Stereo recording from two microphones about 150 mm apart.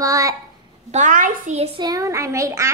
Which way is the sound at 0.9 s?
60° right (ahead or behind).